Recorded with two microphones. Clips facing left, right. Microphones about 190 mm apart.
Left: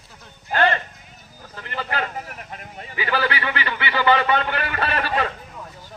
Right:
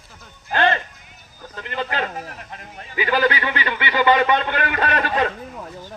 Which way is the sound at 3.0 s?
20° right (ahead or behind).